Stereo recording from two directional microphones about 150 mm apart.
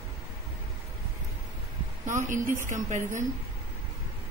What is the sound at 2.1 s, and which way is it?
A woman's voice, 55° right (ahead or behind).